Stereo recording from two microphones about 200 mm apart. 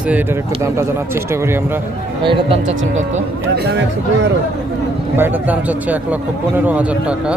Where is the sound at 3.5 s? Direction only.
55° right (ahead or behind).